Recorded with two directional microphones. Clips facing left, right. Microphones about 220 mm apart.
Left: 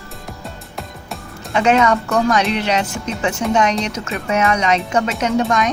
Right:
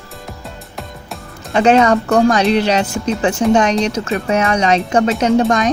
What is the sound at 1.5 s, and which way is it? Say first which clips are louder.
Speech: right 4 dB; 35° right (ahead or behind).